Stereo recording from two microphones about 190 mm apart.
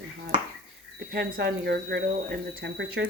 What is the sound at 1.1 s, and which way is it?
Speech, 65° right (ahead or behind).